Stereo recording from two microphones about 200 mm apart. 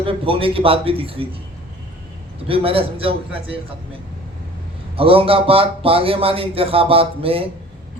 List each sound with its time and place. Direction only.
0.0 s a man's voice: 25° right (ahead or behind)
2.5 s a man's voice: 30° right (ahead or behind)
4.9 s a man's voice: 30° right (ahead or behind)